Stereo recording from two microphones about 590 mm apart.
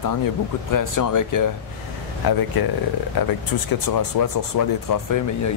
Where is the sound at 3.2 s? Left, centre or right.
Left.